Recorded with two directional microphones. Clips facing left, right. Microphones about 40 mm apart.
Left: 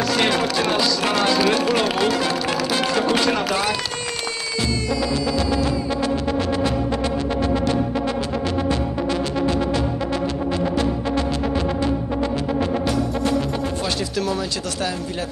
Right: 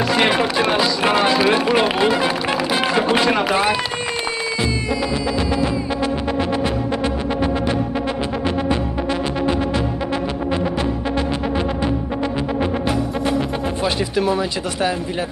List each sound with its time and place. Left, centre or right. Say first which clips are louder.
0.0 s speech: right 3 dB; right
5.1 s music: right 1 dB; right
13.8 s speech: right 4 dB; right